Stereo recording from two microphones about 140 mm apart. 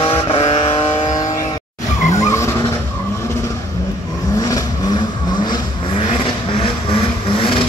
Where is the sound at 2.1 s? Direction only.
20° left (ahead or behind).